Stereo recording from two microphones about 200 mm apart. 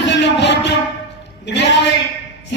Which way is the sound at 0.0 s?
60° left (ahead or behind).